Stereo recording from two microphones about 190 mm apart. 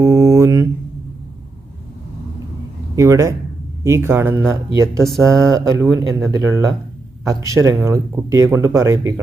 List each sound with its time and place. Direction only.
0.0 s mantra: 15° right (ahead or behind)
2.9 s speech: 15° right (ahead or behind)
5.0 s speech: centre (ahead or behind)
6.3 s speech: 15° right (ahead or behind)